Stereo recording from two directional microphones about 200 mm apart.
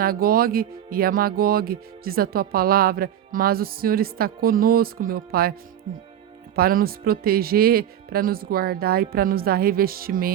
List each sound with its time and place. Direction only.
0.0 s speech: 45° right (ahead or behind)
6.6 s speech: 50° right (ahead or behind)